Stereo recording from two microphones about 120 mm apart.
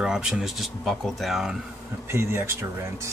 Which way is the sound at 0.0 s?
5° right (ahead or behind).